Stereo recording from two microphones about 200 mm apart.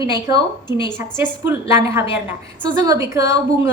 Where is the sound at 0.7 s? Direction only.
20° left (ahead or behind).